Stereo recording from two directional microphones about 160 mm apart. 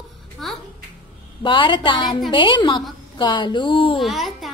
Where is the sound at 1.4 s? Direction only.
30° left (ahead or behind).